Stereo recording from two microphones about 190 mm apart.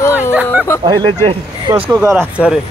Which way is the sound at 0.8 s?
25° right (ahead or behind).